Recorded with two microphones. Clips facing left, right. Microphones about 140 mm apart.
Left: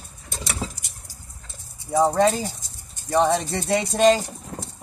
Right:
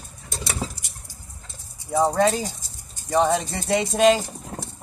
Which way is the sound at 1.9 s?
5° left (ahead or behind).